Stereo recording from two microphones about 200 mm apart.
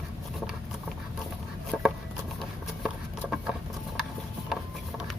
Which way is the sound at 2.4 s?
Centre (ahead or behind).